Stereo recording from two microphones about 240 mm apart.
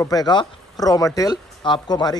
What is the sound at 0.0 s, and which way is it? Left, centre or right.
Speech, centre.